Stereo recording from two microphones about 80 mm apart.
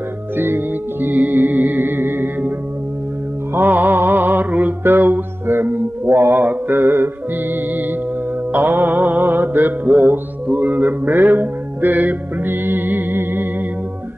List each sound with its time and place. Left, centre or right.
0.4 s music: right
3.5 s mantra: right
8.5 s music: right